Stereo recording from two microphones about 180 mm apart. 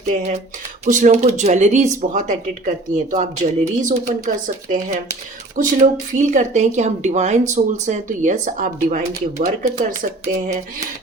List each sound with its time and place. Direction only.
0.0 s a woman's voice: 40° right (ahead or behind)